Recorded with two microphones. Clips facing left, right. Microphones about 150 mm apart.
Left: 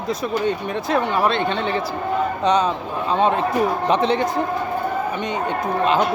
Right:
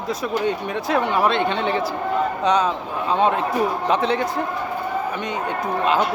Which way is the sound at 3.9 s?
5° right (ahead or behind).